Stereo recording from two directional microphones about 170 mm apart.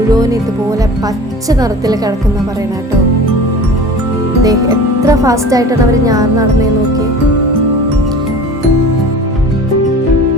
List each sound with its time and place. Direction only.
1.5 s speech: 20° right (ahead or behind)
4.4 s speech: 20° right (ahead or behind)